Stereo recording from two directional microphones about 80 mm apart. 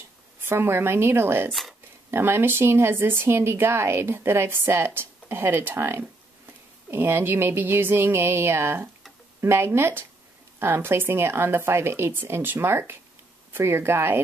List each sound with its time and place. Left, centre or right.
0.4 s speech: right
1.5 s speech: centre
2.0 s speech: right